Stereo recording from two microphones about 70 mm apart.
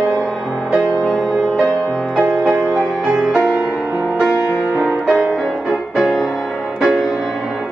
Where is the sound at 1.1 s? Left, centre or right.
Centre.